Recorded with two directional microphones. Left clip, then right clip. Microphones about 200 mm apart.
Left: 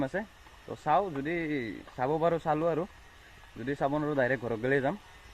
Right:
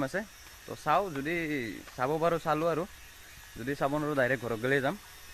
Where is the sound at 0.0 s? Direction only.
5° right (ahead or behind).